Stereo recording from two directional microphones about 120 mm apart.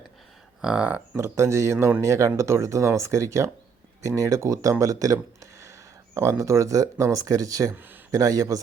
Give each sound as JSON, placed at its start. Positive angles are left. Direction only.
{"t": 0.6, "sound": "speech", "side_deg": -10}
{"t": 1.1, "sound": "speech", "side_deg": -25}
{"t": 7.8, "sound": "a sound", "side_deg": -15}
{"t": 8.1, "sound": "speech", "side_deg": -30}